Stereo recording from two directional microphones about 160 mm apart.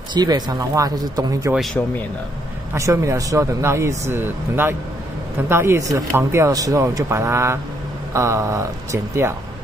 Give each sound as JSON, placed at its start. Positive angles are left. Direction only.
{"t": 0.1, "sound": "speech", "side_deg": -25}
{"t": 1.5, "sound": "speech", "side_deg": 0}
{"t": 2.7, "sound": "speech", "side_deg": -20}